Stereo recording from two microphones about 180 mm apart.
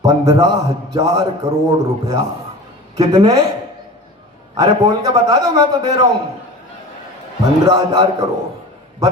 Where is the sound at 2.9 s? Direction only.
20° right (ahead or behind).